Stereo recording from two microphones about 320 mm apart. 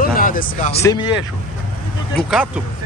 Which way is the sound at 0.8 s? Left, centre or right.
Centre.